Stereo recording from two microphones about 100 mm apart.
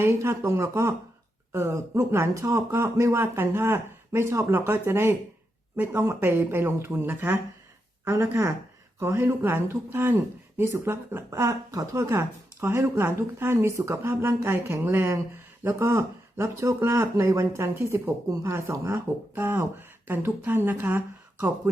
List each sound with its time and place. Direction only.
0.0 s speech: 25° right (ahead or behind)